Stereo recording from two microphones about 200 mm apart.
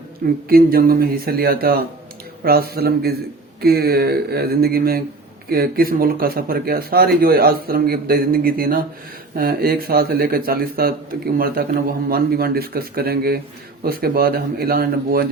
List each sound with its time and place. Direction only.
0.4 s speech: 50° right (ahead or behind)